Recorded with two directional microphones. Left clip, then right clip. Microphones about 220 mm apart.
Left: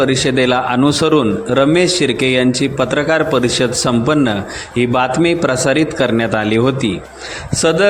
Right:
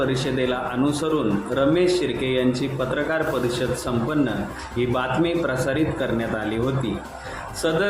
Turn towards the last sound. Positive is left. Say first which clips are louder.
# left 9 dB
turn(degrees=40)  # may be behind; listen again after turning